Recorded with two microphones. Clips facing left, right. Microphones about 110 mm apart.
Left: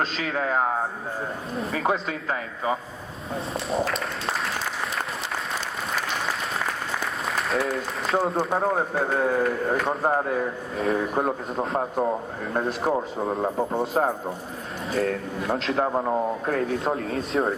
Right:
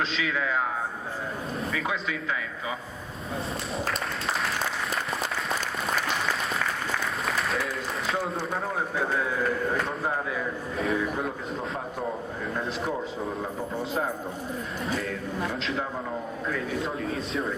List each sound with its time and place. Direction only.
0.0 s a man's voice: 45° left (ahead or behind)
3.7 s speech: centre (ahead or behind)
7.3 s applause: centre (ahead or behind)
8.1 s a man's voice: 40° left (ahead or behind)